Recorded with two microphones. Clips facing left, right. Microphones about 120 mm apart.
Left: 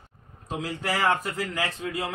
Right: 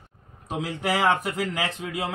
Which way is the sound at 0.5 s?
20° right (ahead or behind).